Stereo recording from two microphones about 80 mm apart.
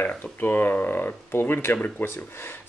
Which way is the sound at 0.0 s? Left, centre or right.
Left.